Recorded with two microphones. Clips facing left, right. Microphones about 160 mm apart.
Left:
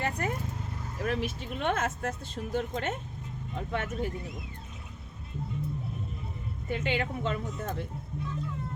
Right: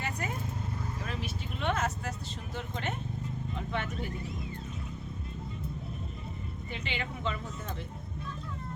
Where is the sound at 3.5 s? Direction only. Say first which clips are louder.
Left 4 dB; 45° left (ahead or behind).